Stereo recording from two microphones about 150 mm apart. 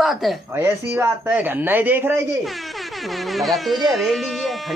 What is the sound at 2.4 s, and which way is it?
Speech, centre (ahead or behind).